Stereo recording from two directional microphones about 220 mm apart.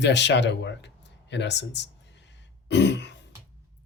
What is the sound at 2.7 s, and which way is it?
Throat clearing, 55° left (ahead or behind).